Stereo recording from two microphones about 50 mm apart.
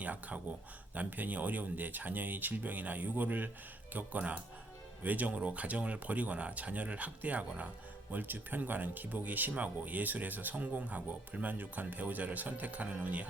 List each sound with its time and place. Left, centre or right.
0.0 s speech: right